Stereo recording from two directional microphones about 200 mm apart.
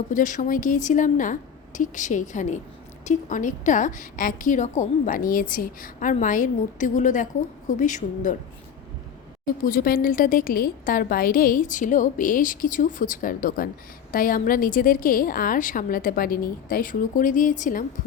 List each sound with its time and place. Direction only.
0.1 s a woman's voice: 40° left (ahead or behind)
9.6 s a woman's voice: 45° left (ahead or behind)